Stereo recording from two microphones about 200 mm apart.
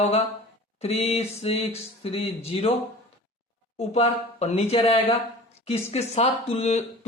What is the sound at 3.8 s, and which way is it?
Speech, 30° left (ahead or behind).